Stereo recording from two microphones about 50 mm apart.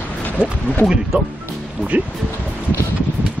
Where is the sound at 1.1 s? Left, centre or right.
Right.